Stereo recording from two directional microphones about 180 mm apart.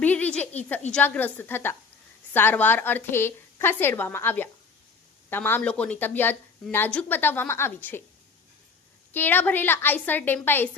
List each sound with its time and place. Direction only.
0.0 s a sound: 10° left (ahead or behind)
0.9 s speech: 5° left (ahead or behind)
9.1 s speech: 10° left (ahead or behind)